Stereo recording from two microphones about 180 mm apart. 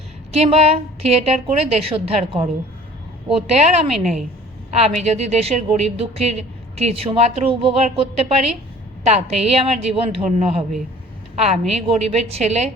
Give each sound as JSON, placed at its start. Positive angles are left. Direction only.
{"t": 0.3, "sound": "a woman's voice", "side_deg": -35}